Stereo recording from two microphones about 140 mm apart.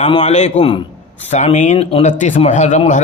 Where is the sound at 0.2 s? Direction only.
55° left (ahead or behind).